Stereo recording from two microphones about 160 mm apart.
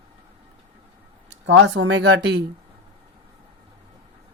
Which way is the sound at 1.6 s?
90° right.